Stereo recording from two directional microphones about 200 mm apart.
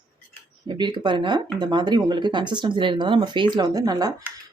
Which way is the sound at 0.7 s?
20° right (ahead or behind).